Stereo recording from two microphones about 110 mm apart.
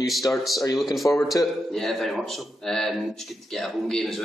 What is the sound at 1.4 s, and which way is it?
Speech, 30° left (ahead or behind).